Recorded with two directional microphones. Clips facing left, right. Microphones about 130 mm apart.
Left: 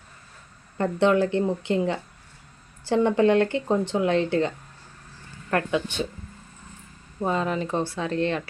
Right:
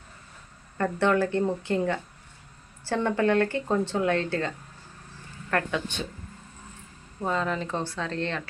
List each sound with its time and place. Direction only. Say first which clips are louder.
0.8 s speech: left 3 dB; 20° left (ahead or behind)
7.2 s speech: left 3 dB; 15° left (ahead or behind)